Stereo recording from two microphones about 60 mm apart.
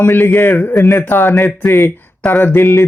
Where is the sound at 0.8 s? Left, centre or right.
Left.